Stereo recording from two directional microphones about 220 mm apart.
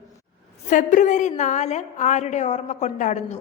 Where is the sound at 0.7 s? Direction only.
35° left (ahead or behind).